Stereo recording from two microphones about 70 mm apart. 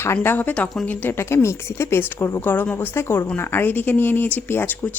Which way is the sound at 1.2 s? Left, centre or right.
Left.